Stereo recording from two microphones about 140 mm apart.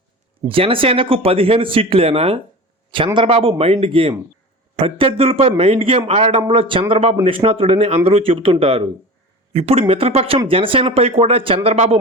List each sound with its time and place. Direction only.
0.4 s speech: 40° right (ahead or behind)